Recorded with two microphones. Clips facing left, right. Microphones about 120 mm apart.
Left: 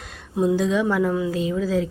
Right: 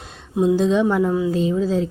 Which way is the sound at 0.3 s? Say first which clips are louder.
Right 3 dB; 25° right (ahead or behind).